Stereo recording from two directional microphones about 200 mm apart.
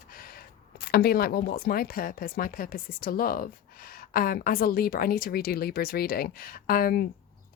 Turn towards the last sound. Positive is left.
turn(degrees=45)  # may be behind; listen again after turning